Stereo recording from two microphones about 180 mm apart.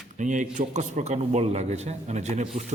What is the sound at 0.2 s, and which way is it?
A man's voice, 45° right (ahead or behind).